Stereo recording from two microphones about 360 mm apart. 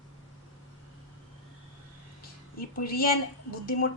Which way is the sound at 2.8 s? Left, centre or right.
Left.